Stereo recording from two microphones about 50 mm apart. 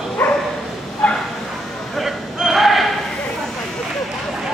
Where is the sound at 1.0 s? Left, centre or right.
Centre.